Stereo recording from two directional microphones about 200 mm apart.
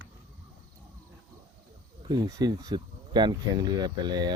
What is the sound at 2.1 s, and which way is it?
Speech, 20° right (ahead or behind).